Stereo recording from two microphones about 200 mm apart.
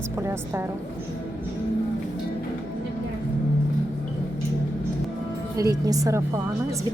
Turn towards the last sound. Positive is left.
turn(degrees=-15)  # may be behind; listen again after turning